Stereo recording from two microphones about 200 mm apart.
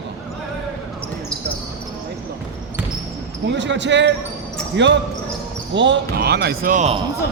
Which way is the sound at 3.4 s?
65° right (ahead or behind).